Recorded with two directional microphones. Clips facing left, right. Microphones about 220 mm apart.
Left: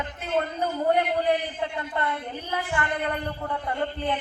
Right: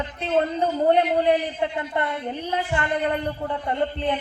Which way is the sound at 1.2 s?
20° right (ahead or behind).